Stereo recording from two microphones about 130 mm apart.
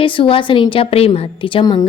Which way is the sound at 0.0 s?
45° left (ahead or behind).